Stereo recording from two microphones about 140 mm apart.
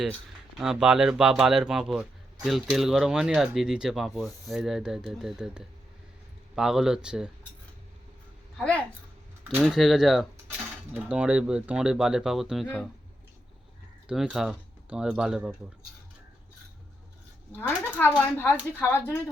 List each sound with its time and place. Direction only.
0.6 s speech: 5° right (ahead or behind)
8.5 s a woman's voice: 5° left (ahead or behind)
14.1 s speech: 5° right (ahead or behind)
17.5 s a woman's voice: 15° left (ahead or behind)